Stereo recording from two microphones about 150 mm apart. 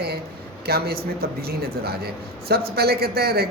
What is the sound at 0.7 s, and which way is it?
A man's voice, 90° right.